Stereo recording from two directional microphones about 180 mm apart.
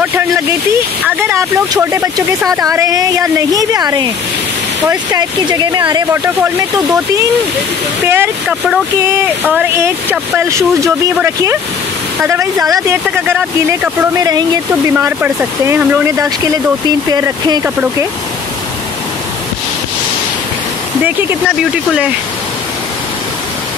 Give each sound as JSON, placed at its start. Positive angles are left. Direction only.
{"t": 0.0, "sound": "speech", "side_deg": -10}
{"t": 8.0, "sound": "speech", "side_deg": -10}
{"t": 16.8, "sound": "speech", "side_deg": -20}
{"t": 21.0, "sound": "speech", "side_deg": -10}